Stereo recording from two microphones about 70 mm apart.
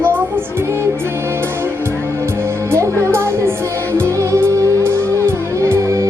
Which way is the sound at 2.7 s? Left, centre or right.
Right.